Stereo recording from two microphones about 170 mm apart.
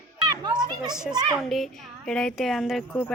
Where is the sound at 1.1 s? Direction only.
25° right (ahead or behind).